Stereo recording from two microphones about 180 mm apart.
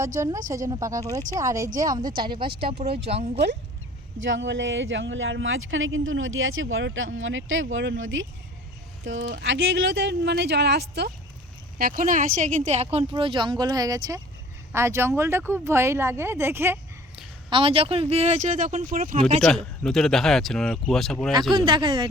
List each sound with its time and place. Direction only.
0.2 s speech: 20° right (ahead or behind)
4.3 s speech: 85° right
11.8 s speech: 50° right (ahead or behind)
13.1 s speech: 25° right (ahead or behind)
17.5 s speech: 30° right (ahead or behind)
19.5 s speech: centre (ahead or behind)
21.5 s speech: 25° right (ahead or behind)